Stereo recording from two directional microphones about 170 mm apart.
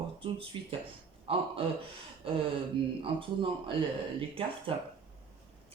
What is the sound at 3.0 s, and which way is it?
Speech, 30° right (ahead or behind).